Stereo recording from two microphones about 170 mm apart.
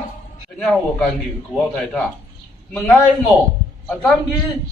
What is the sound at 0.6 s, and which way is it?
A man's voice, 5° left (ahead or behind).